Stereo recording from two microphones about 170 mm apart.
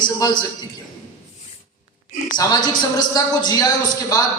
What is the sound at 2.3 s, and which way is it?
A man's voice, 25° left (ahead or behind).